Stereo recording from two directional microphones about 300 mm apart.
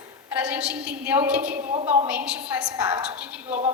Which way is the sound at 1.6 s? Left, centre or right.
Right.